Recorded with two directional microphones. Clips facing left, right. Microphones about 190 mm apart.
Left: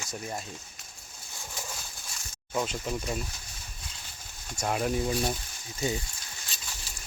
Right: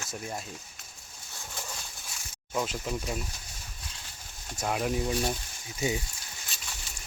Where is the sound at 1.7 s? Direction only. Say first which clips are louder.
Even; 5° left (ahead or behind).